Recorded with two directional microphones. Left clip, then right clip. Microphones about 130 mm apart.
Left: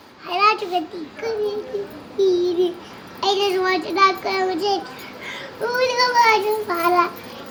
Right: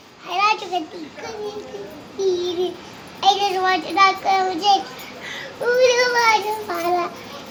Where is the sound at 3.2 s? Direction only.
10° right (ahead or behind).